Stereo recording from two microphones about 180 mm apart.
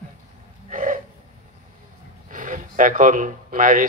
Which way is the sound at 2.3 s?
50° right (ahead or behind).